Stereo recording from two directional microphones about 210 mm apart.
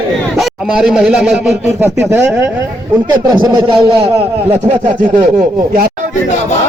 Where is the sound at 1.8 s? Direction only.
10° right (ahead or behind).